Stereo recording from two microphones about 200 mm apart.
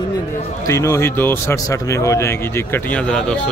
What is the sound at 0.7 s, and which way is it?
A man's voice, 15° left (ahead or behind).